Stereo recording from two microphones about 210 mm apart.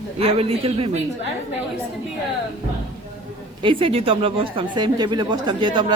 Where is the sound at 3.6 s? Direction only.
25° right (ahead or behind).